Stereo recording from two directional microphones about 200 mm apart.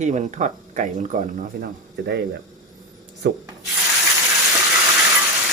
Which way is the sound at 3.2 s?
60° right (ahead or behind).